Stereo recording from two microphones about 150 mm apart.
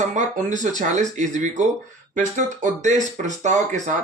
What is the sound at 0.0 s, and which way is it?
Speech, 55° right (ahead or behind).